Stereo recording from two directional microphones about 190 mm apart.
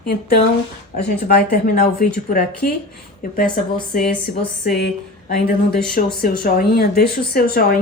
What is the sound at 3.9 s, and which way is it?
Speech, 45° left (ahead or behind).